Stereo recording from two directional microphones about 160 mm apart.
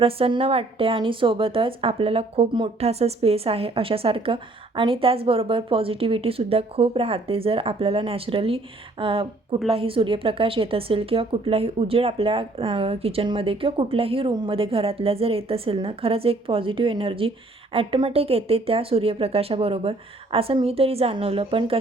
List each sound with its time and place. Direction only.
0.0 s a woman's voice: 35° right (ahead or behind)